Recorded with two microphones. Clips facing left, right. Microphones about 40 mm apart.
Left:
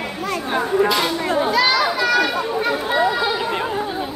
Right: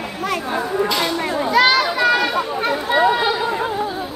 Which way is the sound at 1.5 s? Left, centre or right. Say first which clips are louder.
Right 5 dB; right.